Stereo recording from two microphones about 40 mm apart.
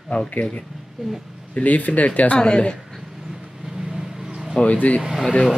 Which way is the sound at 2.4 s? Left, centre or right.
Left.